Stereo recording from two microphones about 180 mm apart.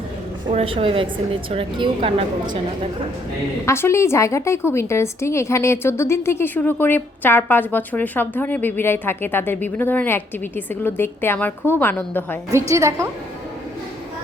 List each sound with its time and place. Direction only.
0.5 s speech: 30° right (ahead or behind)
3.7 s a woman's voice: 15° left (ahead or behind)
12.5 s a woman's voice: 15° right (ahead or behind)